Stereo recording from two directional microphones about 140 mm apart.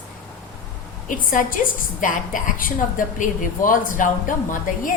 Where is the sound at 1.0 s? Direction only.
70° left (ahead or behind).